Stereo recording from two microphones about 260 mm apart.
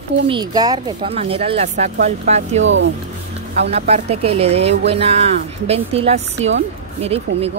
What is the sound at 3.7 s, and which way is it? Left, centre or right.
Speech, right.